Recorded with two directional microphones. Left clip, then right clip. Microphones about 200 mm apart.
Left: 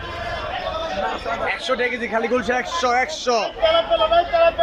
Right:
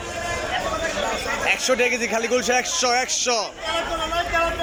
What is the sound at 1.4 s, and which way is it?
A man's voice, centre (ahead or behind).